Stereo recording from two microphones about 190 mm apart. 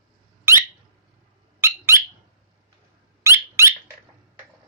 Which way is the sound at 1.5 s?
15° right (ahead or behind).